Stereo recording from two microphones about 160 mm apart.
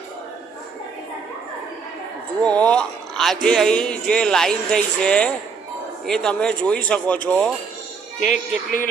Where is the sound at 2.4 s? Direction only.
5° left (ahead or behind).